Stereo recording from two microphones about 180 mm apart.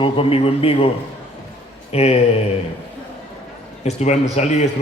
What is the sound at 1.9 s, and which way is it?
Speech, 35° left (ahead or behind).